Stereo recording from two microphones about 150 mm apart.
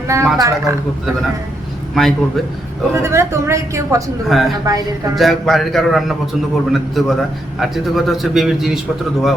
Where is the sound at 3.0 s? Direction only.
20° right (ahead or behind).